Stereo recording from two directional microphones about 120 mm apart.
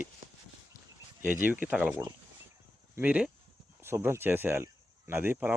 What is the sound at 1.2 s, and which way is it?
Speech, 15° right (ahead or behind).